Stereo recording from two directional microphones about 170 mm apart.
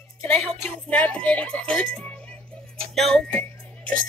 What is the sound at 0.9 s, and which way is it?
Speech, 10° left (ahead or behind).